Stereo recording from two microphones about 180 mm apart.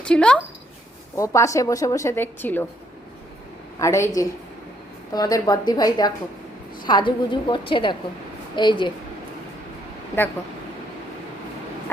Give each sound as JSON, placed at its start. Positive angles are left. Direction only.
{"t": 0.0, "sound": "speech", "side_deg": 5}
{"t": 1.1, "sound": "a woman's voice", "side_deg": 15}
{"t": 3.8, "sound": "a woman's voice", "side_deg": 15}